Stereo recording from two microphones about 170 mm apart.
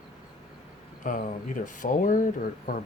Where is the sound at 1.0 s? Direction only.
50° left (ahead or behind).